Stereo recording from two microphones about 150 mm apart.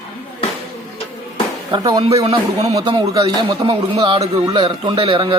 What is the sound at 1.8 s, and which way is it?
Speech, 25° right (ahead or behind).